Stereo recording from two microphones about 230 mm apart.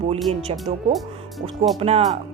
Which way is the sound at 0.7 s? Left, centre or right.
Right.